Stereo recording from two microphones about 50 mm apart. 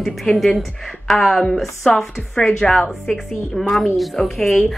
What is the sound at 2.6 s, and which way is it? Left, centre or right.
Speech, centre.